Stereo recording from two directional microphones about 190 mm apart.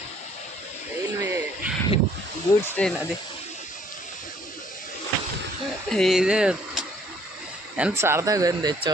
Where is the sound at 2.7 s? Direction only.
5° left (ahead or behind).